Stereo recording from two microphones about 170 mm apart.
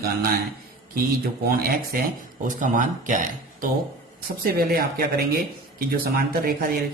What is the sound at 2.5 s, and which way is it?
Speech, 50° right (ahead or behind).